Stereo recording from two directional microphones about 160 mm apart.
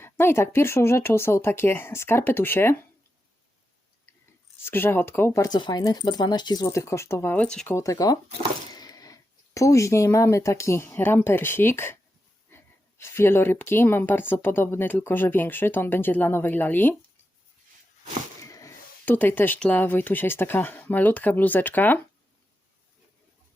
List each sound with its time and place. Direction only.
0.0 s a woman's voice: 15° left (ahead or behind)
4.6 s a woman's voice: 15° left (ahead or behind)
7.8 s speech: 20° left (ahead or behind)
8.7 s a sound: 25° left (ahead or behind)
9.6 s a woman's voice: 20° left (ahead or behind)
18.4 s speech: 20° left (ahead or behind)